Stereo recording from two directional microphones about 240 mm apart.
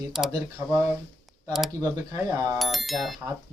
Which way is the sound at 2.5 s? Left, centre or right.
Centre.